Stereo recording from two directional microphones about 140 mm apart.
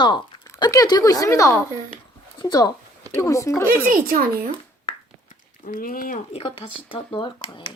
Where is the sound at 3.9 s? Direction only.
90° right.